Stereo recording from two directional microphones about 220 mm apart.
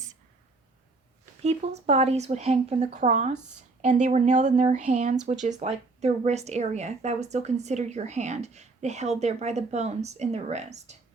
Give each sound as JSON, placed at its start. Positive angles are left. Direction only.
{"t": 1.4, "sound": "speech", "side_deg": -30}